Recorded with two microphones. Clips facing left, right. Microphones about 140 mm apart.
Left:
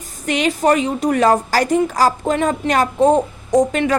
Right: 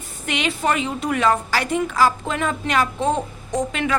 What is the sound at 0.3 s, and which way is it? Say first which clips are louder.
A woman's voice: left 6 dB; 40° left (ahead or behind).